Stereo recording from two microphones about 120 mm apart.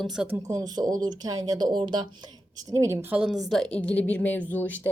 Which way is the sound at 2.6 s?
30° right (ahead or behind).